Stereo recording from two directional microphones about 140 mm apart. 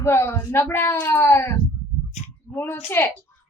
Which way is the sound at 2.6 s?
15° left (ahead or behind).